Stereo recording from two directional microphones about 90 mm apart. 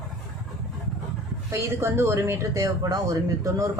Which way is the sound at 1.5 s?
30° right (ahead or behind).